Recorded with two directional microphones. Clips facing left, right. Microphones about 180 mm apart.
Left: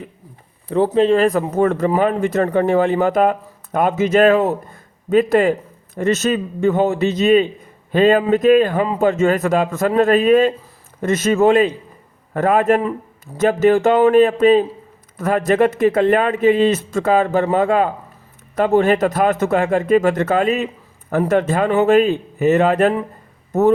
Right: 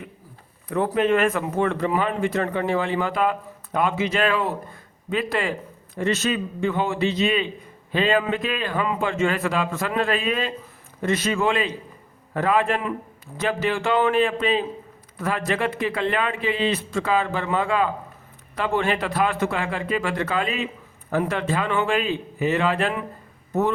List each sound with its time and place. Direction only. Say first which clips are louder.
0.7 s speech: left 6 dB; 30° left (ahead or behind)